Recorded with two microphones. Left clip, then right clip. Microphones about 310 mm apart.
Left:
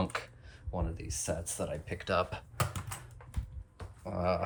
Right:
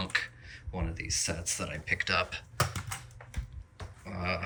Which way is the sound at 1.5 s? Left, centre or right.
Centre.